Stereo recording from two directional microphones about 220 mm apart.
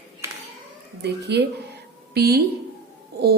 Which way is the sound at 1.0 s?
50° right (ahead or behind).